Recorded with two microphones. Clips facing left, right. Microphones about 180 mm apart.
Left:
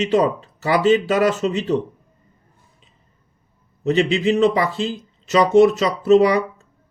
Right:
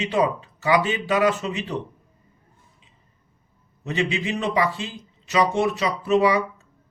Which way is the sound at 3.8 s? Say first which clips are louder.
Left 8 dB; 35° left (ahead or behind).